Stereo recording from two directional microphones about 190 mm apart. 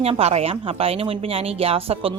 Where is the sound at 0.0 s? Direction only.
30° right (ahead or behind).